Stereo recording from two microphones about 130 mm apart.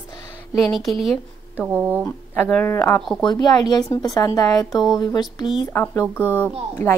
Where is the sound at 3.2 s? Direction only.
30° left (ahead or behind).